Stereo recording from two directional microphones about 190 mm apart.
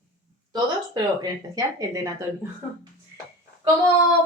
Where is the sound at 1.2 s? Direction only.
20° right (ahead or behind).